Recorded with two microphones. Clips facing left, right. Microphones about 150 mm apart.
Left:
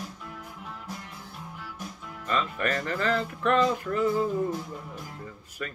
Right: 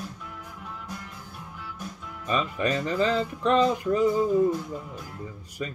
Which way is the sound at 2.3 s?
15° right (ahead or behind).